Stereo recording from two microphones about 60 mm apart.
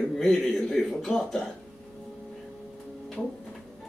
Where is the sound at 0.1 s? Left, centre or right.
Centre.